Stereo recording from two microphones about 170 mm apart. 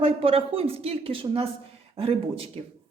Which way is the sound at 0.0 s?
35° right (ahead or behind).